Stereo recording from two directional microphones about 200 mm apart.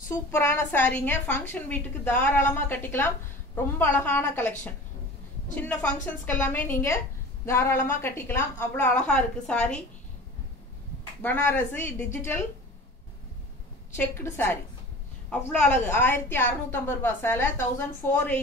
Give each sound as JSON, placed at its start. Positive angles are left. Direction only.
{"t": 0.1, "sound": "a woman's voice", "side_deg": 15}
{"t": 11.2, "sound": "a woman's voice", "side_deg": 10}
{"t": 13.9, "sound": "a woman's voice", "side_deg": 10}